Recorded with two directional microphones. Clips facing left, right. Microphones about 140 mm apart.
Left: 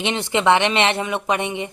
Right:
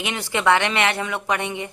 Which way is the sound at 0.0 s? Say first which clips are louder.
Left 3 dB; 25° left (ahead or behind).